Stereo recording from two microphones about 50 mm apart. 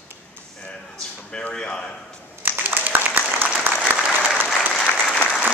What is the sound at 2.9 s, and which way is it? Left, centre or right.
Applause, right.